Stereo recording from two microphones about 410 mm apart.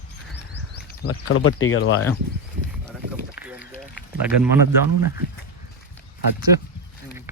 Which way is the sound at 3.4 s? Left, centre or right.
Centre.